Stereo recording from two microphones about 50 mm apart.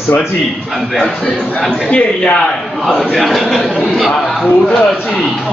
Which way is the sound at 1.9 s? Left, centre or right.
Left.